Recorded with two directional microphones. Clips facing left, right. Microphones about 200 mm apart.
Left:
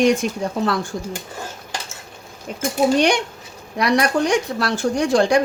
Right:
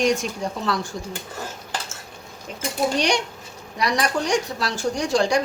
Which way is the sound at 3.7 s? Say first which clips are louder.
Left 5 dB; 60° left (ahead or behind).